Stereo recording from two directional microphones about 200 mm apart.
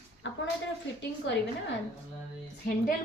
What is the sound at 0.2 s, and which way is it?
Speech, 65° left (ahead or behind).